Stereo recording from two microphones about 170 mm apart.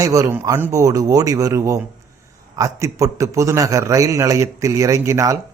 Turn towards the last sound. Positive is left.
turn(degrees=-15)  # may be behind; listen again after turning